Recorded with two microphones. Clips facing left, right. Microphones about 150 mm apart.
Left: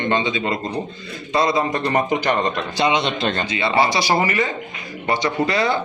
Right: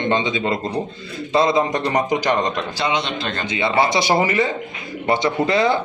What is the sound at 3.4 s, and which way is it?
A man's voice, 20° right (ahead or behind).